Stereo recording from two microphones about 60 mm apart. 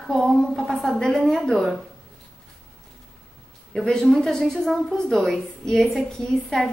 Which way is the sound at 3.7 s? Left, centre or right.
Centre.